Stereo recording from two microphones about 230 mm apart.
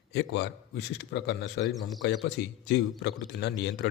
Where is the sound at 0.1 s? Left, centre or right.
Left.